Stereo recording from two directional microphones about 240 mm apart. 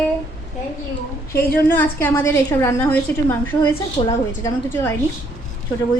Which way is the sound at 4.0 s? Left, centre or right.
Centre.